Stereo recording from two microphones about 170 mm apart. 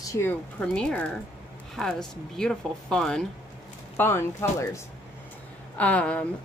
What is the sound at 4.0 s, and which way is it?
A woman's voice, 15° left (ahead or behind).